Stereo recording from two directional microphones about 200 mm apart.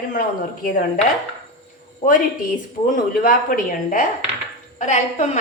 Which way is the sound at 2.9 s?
40° left (ahead or behind).